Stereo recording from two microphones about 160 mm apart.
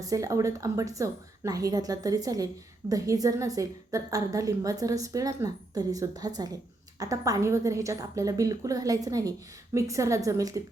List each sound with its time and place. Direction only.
0.0 s a woman's voice: 20° right (ahead or behind)